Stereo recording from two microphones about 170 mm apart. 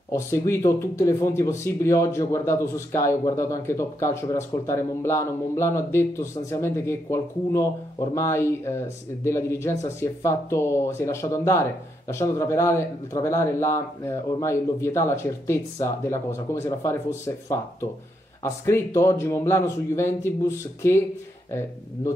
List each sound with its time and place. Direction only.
0.1 s speech: 15° left (ahead or behind)